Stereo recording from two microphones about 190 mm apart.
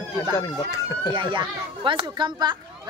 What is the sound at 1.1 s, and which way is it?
Speech, 25° right (ahead or behind).